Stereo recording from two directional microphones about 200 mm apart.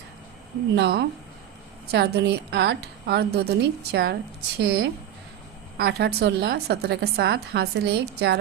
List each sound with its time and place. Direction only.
0.8 s a woman's voice: 55° right (ahead or behind)